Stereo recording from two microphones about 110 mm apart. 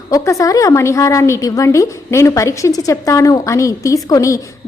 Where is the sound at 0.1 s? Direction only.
30° left (ahead or behind).